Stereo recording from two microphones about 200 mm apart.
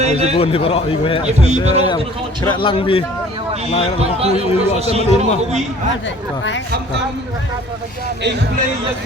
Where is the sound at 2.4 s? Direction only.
25° left (ahead or behind).